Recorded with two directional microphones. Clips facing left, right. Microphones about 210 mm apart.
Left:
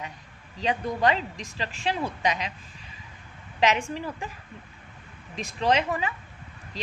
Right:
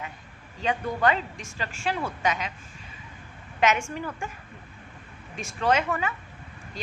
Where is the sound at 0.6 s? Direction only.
35° left (ahead or behind).